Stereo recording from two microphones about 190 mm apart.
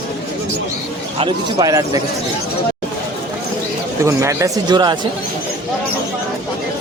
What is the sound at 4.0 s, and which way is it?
Speech, 15° right (ahead or behind).